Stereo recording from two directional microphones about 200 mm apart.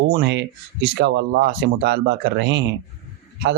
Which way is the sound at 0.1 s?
55° right (ahead or behind).